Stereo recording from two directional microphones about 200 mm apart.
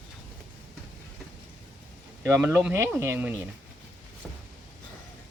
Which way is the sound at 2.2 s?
10° right (ahead or behind).